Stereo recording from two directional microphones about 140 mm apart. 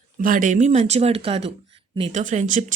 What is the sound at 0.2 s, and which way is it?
Speech, 80° right.